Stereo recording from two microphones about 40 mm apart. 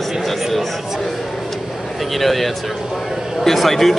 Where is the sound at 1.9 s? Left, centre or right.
Centre.